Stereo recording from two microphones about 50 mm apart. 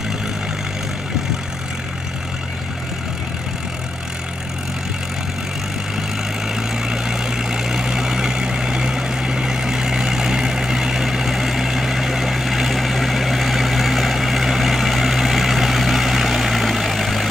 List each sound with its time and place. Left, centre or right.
6.5 s vehicle: centre